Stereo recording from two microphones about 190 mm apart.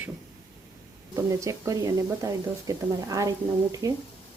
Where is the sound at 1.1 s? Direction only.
15° right (ahead or behind).